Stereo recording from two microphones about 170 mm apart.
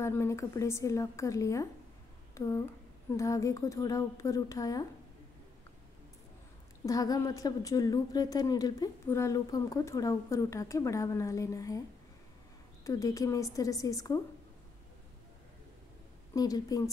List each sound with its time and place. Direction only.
0.0 s a woman's voice: 15° left (ahead or behind)
6.9 s speech: 20° left (ahead or behind)
12.8 s speech: 20° left (ahead or behind)
16.3 s speech: 20° left (ahead or behind)